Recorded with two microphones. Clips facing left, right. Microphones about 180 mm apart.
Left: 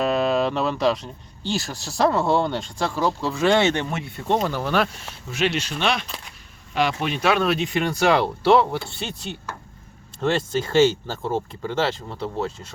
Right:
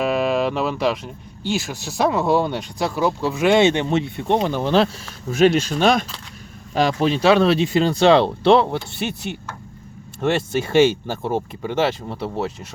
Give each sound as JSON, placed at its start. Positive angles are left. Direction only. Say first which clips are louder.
{"t": 0.0, "sound": "speech", "louder": "right 1 dB", "side_deg": -5}
{"t": 5.3, "sound": "speech", "louder": "right 8 dB", "side_deg": -45}
{"t": 10.2, "sound": "speech", "louder": "right 2 dB", "side_deg": -10}